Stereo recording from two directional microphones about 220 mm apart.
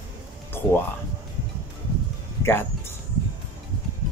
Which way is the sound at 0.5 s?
10° left (ahead or behind).